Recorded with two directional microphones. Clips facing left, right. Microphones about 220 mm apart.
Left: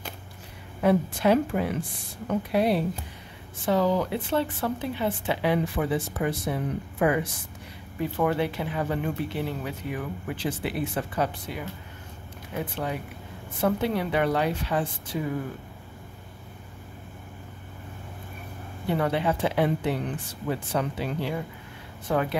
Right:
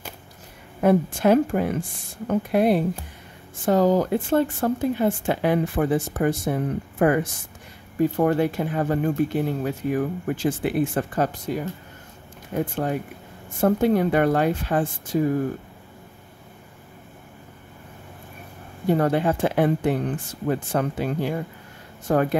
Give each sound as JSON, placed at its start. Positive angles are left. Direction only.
{"t": 0.7, "sound": "speech", "side_deg": -50}
{"t": 18.9, "sound": "speech", "side_deg": -45}